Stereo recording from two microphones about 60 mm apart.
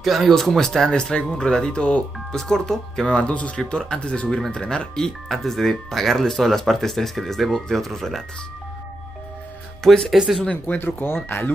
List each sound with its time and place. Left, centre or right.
0.0 s speech: centre
2.1 s speech: centre
3.2 s speech: left; by 8.2 s centre
10.1 s speech: centre
10.7 s speech: left